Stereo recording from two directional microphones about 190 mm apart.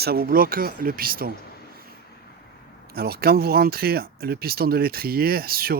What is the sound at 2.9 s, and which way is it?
Speech, 55° right (ahead or behind).